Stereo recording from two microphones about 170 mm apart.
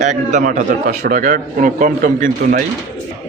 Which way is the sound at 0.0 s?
45° right (ahead or behind).